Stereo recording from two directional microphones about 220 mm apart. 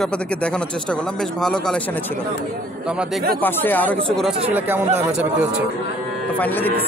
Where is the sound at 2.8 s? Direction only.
5° right (ahead or behind).